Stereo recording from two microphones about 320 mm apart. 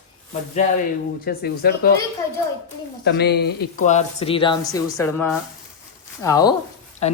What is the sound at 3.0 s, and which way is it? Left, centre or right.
Speech, left.